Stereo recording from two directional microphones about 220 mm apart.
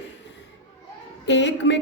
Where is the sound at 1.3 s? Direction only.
55° left (ahead or behind).